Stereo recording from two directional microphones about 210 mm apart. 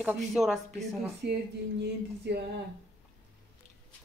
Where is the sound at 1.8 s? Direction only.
55° right (ahead or behind).